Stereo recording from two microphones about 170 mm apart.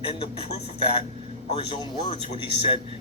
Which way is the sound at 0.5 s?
30° left (ahead or behind).